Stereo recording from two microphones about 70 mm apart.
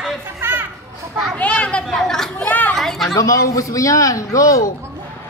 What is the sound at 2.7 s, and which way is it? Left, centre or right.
Speech, centre.